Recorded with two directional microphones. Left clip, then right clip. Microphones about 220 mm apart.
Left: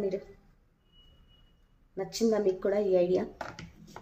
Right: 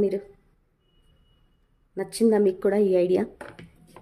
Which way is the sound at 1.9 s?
45° right (ahead or behind).